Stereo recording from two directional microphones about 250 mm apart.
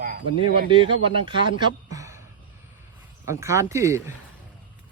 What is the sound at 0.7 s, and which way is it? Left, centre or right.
Speech, right.